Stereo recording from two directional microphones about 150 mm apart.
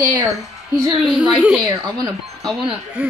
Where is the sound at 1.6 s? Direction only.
25° right (ahead or behind).